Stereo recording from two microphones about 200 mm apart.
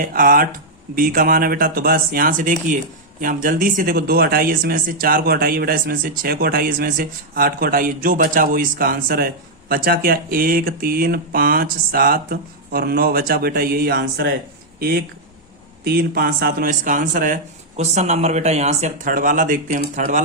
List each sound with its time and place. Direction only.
0.0 s speech: 45° right (ahead or behind)